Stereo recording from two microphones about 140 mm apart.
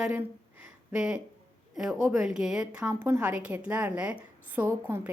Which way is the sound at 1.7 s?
5° right (ahead or behind).